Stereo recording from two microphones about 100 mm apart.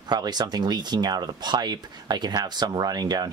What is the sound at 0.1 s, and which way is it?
Speech, 45° right (ahead or behind).